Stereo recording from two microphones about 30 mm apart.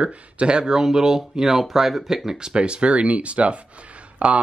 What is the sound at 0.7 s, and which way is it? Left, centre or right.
Speech, centre.